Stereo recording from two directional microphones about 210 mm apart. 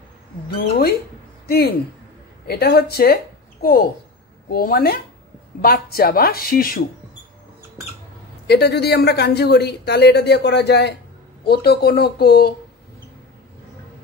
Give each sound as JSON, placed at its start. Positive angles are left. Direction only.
{"t": 0.7, "sound": "speech", "side_deg": 50}
{"t": 2.4, "sound": "speech", "side_deg": 50}
{"t": 8.5, "sound": "speech", "side_deg": 50}